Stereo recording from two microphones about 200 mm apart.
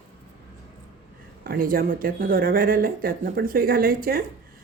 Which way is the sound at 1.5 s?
45° right (ahead or behind).